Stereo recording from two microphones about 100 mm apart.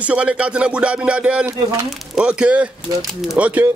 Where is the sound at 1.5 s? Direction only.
30° right (ahead or behind).